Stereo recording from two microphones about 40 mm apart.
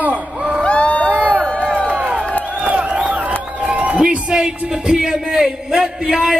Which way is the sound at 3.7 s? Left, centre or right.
Right.